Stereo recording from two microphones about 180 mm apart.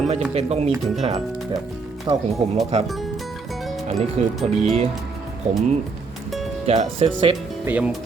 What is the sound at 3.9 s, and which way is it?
Speech, 40° right (ahead or behind).